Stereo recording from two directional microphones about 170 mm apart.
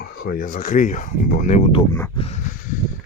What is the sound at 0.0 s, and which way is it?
Speech, 65° left (ahead or behind).